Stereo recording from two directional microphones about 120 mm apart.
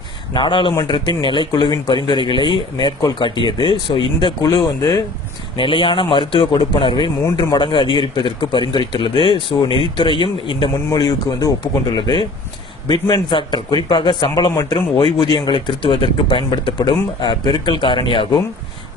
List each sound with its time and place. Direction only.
0.3 s a man's voice: 40° left (ahead or behind)
5.6 s a man's voice: 45° left (ahead or behind)
10.9 s speech: 35° left (ahead or behind)
14.5 s a man's voice: 30° left (ahead or behind)